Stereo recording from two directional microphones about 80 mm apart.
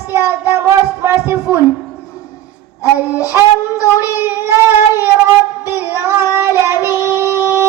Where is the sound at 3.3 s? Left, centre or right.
Right.